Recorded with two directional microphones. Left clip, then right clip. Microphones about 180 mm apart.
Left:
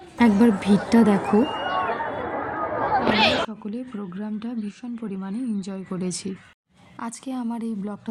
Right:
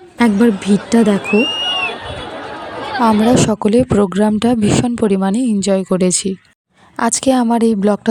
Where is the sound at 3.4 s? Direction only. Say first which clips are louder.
Right 17 dB; 70° right (ahead or behind).